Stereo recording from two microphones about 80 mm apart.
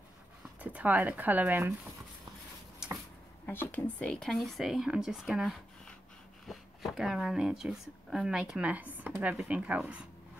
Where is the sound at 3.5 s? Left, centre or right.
Left.